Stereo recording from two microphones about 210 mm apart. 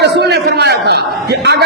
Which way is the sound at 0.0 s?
50° right (ahead or behind).